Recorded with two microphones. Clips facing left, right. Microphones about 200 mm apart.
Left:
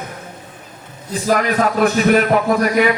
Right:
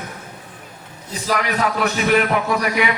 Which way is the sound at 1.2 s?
45° left (ahead or behind).